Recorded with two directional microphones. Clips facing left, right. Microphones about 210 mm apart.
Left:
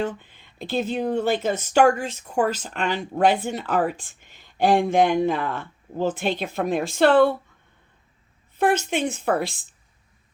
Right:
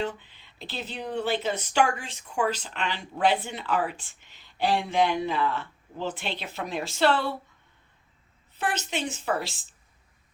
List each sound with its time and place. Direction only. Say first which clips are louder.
0.0 s speech: left 4 dB; 50° left (ahead or behind)
8.5 s speech: left 9 dB; 50° left (ahead or behind)